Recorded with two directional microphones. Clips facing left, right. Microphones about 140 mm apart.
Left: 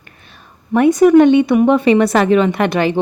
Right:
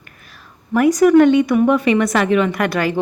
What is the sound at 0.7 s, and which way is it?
A woman's voice, 25° left (ahead or behind).